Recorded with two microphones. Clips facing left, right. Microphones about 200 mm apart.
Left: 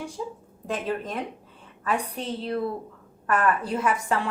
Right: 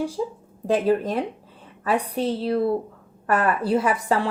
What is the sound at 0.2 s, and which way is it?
A woman's voice, 30° right (ahead or behind).